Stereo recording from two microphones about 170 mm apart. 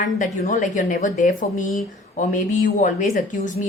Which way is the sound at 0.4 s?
50° left (ahead or behind).